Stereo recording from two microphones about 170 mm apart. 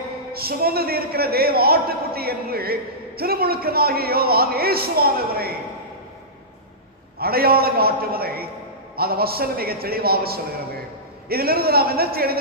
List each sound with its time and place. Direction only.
0.3 s a man's voice: 65° right (ahead or behind)
7.2 s a man's voice: 65° right (ahead or behind)